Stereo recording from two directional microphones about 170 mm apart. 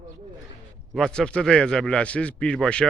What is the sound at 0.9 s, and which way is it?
Speech, 5° left (ahead or behind).